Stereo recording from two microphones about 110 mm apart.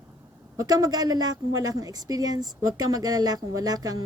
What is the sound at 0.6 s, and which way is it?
A woman's voice, 35° right (ahead or behind).